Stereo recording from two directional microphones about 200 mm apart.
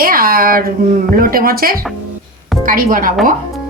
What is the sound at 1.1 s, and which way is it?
A woman's voice, 45° right (ahead or behind).